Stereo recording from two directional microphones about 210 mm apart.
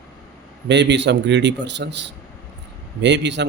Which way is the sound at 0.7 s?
55° right (ahead or behind).